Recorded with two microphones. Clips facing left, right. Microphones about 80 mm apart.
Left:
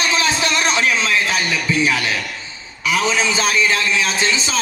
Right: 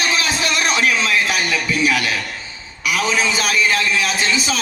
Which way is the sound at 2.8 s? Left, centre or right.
Left.